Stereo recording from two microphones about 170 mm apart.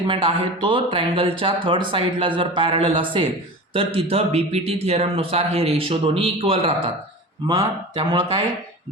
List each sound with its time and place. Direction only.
0.1 s a man's voice: 30° right (ahead or behind)